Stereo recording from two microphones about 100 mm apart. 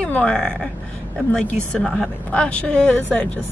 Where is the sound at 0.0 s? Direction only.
10° left (ahead or behind).